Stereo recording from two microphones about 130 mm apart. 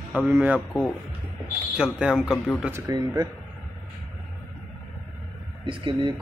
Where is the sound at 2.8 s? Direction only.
30° right (ahead or behind).